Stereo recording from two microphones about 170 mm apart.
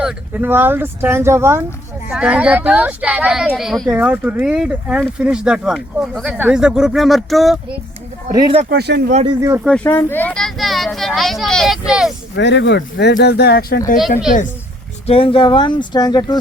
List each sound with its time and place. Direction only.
0.0 s speech: 10° right (ahead or behind)
3.8 s speech: 10° right (ahead or behind)
8.3 s speech: 25° right (ahead or behind)
8.7 s speech: 75° right (ahead or behind)
9.2 s speech: 20° right (ahead or behind)
9.6 s speech: 10° left (ahead or behind)
12.4 s speech: 90° left; by 14.0 s 55° left (ahead or behind)
15.0 s speech: 35° left (ahead or behind)